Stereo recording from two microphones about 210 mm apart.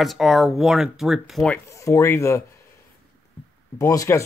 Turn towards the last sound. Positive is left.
turn(degrees=15)  # may be behind; listen again after turning